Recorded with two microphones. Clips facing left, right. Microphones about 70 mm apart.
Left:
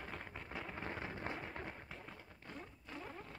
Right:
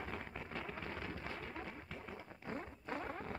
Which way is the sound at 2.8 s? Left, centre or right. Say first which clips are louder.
Right 7 dB; right.